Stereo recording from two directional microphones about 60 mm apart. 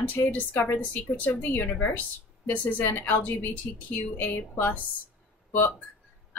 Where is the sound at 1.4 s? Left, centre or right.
Left.